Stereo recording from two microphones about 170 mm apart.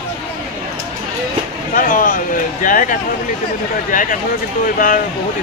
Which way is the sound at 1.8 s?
50° left (ahead or behind).